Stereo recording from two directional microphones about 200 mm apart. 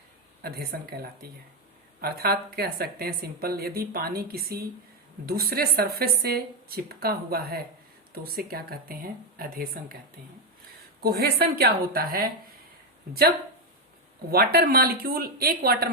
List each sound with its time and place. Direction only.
0.4 s speech: 50° right (ahead or behind)
2.0 s speech: 50° right (ahead or behind)
11.0 s speech: 50° right (ahead or behind)
14.3 s speech: 50° right (ahead or behind)